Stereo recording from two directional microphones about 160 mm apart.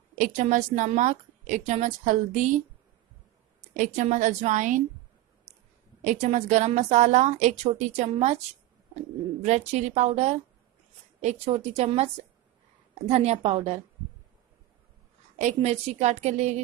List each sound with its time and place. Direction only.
0.2 s a woman's voice: 50° right (ahead or behind)
3.7 s a woman's voice: 50° right (ahead or behind)
6.0 s a woman's voice: 50° right (ahead or behind)
9.4 s a woman's voice: 45° right (ahead or behind)
15.3 s a woman's voice: 45° right (ahead or behind)